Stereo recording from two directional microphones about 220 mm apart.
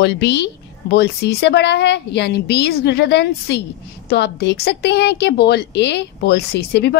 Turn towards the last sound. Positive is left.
turn(degrees=50)  # may be behind; listen again after turning